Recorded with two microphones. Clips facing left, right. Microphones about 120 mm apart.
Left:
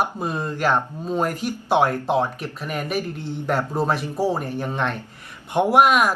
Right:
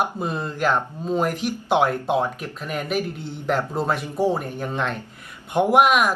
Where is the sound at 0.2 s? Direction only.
10° left (ahead or behind).